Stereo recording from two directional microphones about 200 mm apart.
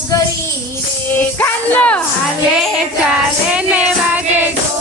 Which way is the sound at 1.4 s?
10° left (ahead or behind).